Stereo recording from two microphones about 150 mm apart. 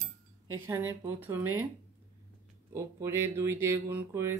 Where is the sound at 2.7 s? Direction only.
20° right (ahead or behind).